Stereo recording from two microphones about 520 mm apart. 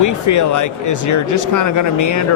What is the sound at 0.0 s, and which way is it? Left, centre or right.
Speech, left.